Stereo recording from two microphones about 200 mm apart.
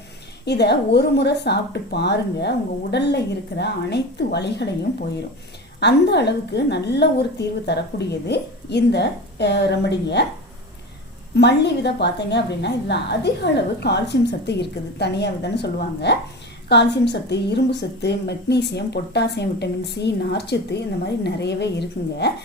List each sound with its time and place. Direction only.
0.4 s a woman's voice: 55° left (ahead or behind)
5.8 s a woman's voice: 60° left (ahead or behind)
11.3 s a woman's voice: 60° left (ahead or behind)